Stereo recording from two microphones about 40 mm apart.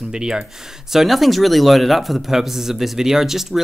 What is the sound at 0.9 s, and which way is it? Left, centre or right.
Speech, centre.